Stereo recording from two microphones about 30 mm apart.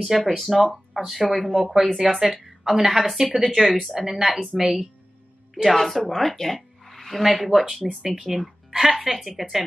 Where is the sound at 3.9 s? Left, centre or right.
Centre.